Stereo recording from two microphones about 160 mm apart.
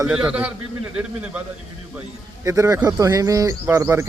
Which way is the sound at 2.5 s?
20° right (ahead or behind).